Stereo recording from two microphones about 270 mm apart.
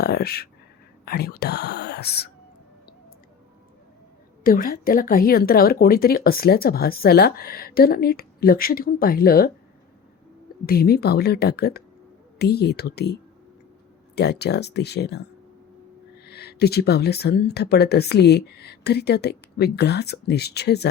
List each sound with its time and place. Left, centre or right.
0.0 s a woman's voice: left
4.4 s a woman's voice: left
10.7 s a woman's voice: left
14.2 s a woman's voice: left
16.2 s a woman's voice: left